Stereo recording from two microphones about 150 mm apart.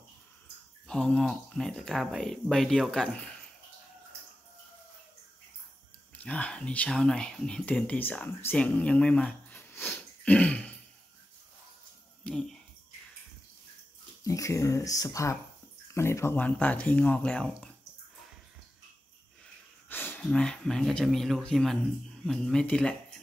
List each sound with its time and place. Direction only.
0.8 s speech: 5° left (ahead or behind)
6.1 s speech: 10° left (ahead or behind)
9.8 s a sound: 5° left (ahead or behind)
12.3 s speech: 5° left (ahead or behind)
14.2 s speech: 20° left (ahead or behind)
19.9 s speech: 10° left (ahead or behind)